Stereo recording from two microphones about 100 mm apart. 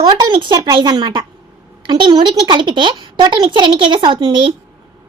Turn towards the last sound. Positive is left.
turn(degrees=-55)  # may be behind; listen again after turning